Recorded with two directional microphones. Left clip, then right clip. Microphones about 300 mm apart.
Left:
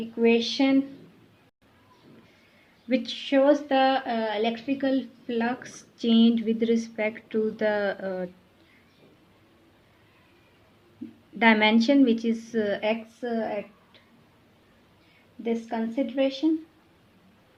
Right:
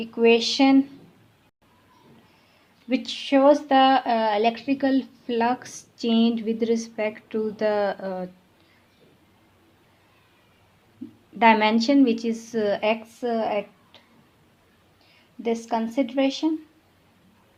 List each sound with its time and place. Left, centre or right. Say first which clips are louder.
0.2 s a woman's voice: right 4 dB; centre
2.9 s a woman's voice: right 2 dB; centre
11.3 s a woman's voice: right 3 dB; centre
15.4 s speech: right 4 dB; centre